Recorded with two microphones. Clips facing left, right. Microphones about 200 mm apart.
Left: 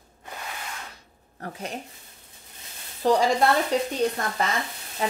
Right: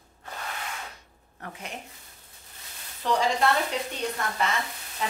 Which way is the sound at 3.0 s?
35° left (ahead or behind).